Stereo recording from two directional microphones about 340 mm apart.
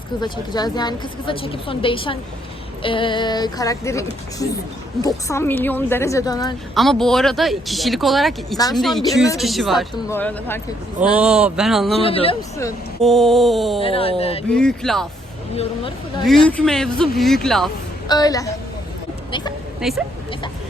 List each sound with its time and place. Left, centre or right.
0.2 s a woman's voice: centre
12.0 s speech: centre
13.8 s a woman's voice: centre
14.5 s speech: centre
15.5 s a woman's voice: centre
16.4 s a woman's voice: centre
19.8 s speech: centre